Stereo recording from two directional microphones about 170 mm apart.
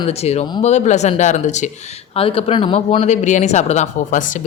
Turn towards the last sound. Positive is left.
turn(degrees=50)  # may be behind; listen again after turning